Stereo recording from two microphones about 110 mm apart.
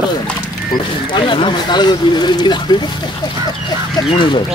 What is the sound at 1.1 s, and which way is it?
Speech, 45° left (ahead or behind).